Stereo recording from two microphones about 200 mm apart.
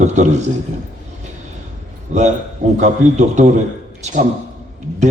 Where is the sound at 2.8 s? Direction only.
35° right (ahead or behind).